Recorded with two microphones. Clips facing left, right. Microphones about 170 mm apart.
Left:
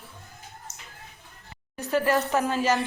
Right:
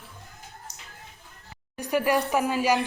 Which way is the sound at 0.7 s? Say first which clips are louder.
Even; 15° right (ahead or behind).